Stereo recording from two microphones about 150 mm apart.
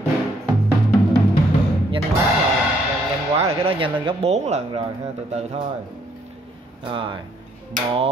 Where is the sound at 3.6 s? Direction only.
35° right (ahead or behind).